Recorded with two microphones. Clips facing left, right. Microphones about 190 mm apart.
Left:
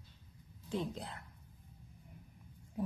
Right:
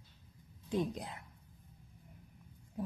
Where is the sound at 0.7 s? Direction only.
15° right (ahead or behind).